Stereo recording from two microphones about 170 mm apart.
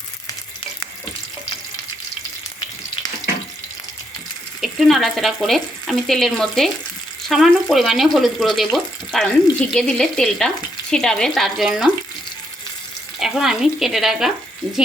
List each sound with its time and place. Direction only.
4.6 s speech: centre (ahead or behind)
13.1 s speech: centre (ahead or behind)